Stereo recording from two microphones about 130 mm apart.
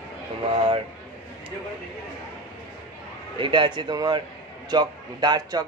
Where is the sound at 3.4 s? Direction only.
35° right (ahead or behind).